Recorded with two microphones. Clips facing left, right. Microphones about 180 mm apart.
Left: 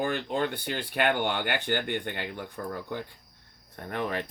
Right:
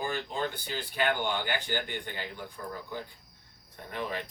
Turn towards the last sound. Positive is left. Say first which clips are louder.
# left 4 dB
turn(degrees=55)  # may be behind; listen again after turning